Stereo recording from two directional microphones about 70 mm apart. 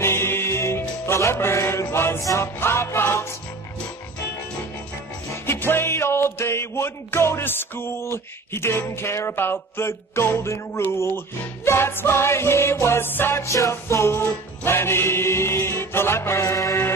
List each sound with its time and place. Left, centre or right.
0.0 s music: left
5.5 s music: left